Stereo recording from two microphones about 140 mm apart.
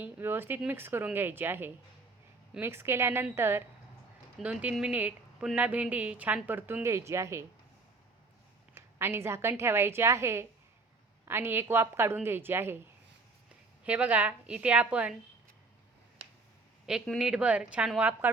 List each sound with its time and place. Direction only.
0.0 s a woman's voice: 15° right (ahead or behind)
8.7 s a woman's voice: 15° right (ahead or behind)
16.8 s a woman's voice: 5° right (ahead or behind)